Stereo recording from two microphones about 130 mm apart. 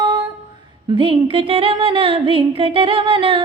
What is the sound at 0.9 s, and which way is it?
Music, 40° right (ahead or behind).